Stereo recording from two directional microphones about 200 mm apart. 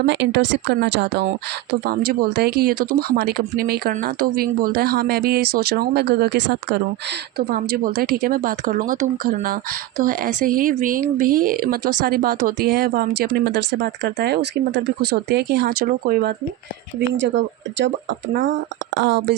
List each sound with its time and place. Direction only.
0.0 s a woman's voice: 60° right (ahead or behind)
17.2 s a woman's voice: 65° right (ahead or behind)